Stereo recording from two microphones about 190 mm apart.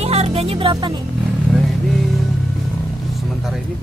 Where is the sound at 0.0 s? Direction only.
30° right (ahead or behind).